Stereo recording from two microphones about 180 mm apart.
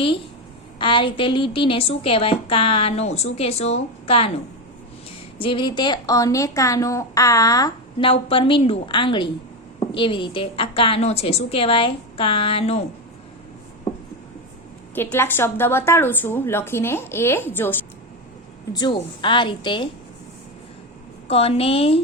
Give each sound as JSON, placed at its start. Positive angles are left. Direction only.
{"t": 0.8, "sound": "a woman's voice", "side_deg": 30}
{"t": 5.4, "sound": "a woman's voice", "side_deg": 30}
{"t": 14.9, "sound": "a woman's voice", "side_deg": 10}
{"t": 18.7, "sound": "a woman's voice", "side_deg": 25}
{"t": 21.2, "sound": "a woman's voice", "side_deg": 35}